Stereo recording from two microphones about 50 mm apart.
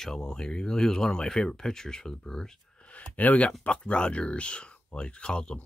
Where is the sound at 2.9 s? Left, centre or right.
Left.